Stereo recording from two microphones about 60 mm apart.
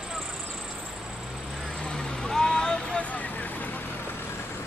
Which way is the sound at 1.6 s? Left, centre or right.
Centre.